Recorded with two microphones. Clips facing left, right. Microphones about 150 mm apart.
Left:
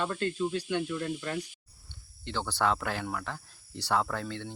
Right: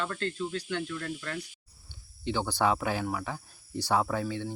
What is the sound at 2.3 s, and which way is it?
Speech, 15° right (ahead or behind).